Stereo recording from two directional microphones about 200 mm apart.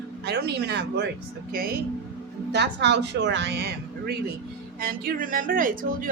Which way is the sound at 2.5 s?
60° right (ahead or behind).